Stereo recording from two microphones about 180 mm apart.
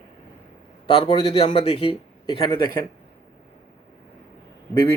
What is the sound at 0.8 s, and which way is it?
A man's voice, 25° left (ahead or behind).